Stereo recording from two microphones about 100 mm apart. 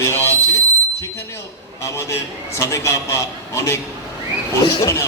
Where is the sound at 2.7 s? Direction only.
30° left (ahead or behind).